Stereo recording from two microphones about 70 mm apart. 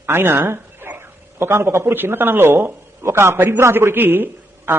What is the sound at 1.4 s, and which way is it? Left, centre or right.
Speech, right.